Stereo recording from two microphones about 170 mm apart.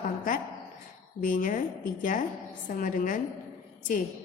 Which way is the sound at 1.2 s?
50° left (ahead or behind).